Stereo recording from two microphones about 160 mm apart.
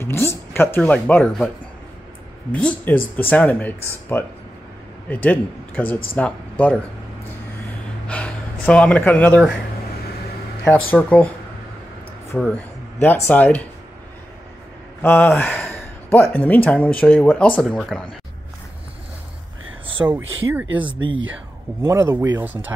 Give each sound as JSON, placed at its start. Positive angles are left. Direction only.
{"t": 0.0, "sound": "speech", "side_deg": 15}
{"t": 2.6, "sound": "speech", "side_deg": 10}
{"t": 8.1, "sound": "gasp", "side_deg": 5}
{"t": 10.6, "sound": "speech", "side_deg": 10}
{"t": 12.4, "sound": "speech", "side_deg": 5}
{"t": 15.0, "sound": "speech", "side_deg": 10}
{"t": 20.0, "sound": "speech", "side_deg": -15}